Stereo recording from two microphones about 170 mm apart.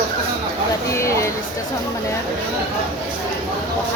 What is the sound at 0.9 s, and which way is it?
Speech, 15° left (ahead or behind).